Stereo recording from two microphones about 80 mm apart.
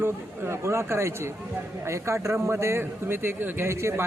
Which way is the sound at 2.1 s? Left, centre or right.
Right.